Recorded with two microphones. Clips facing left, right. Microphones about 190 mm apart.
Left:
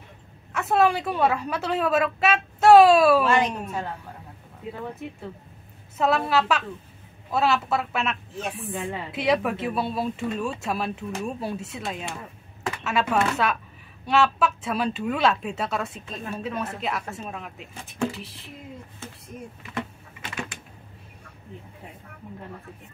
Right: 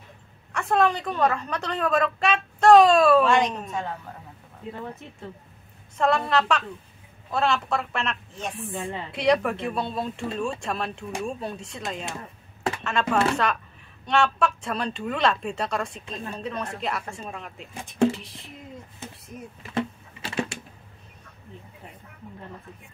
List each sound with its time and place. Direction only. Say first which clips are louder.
0.5 s a woman's voice: left 1 dB; 5° left (ahead or behind)
5.9 s a woman's voice: even; 5° left (ahead or behind)
12.8 s a woman's voice: even; 5° left (ahead or behind)
19.7 s a sound: right 6 dB; 30° right (ahead or behind)